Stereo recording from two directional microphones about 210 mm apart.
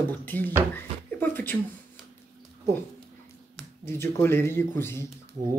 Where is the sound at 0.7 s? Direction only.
10° left (ahead or behind).